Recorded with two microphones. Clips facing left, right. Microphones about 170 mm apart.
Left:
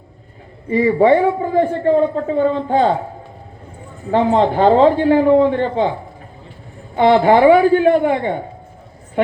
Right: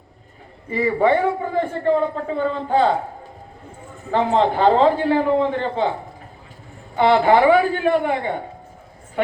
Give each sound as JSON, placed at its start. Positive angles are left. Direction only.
{"t": 0.7, "sound": "a man's voice", "side_deg": 40}
{"t": 4.1, "sound": "a man's voice", "side_deg": 40}
{"t": 6.9, "sound": "a man's voice", "side_deg": 45}